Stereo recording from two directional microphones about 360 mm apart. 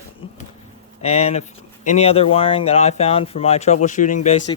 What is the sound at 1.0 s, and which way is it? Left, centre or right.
Speech, centre.